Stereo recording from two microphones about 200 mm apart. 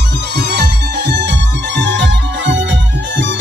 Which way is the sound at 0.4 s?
60° right (ahead or behind).